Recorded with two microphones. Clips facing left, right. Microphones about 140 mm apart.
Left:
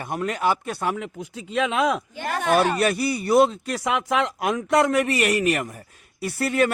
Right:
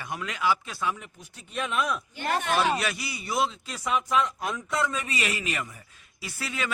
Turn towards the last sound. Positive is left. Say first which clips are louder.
# left 12 dB
turn(degrees=60)  # may be behind; listen again after turning